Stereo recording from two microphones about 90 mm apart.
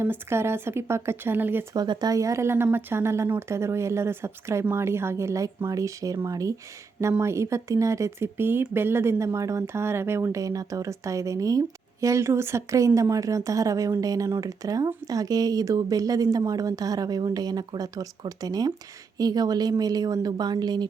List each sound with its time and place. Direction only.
0.0 s speech: 25° right (ahead or behind)
1.7 s a woman's voice: 50° right (ahead or behind)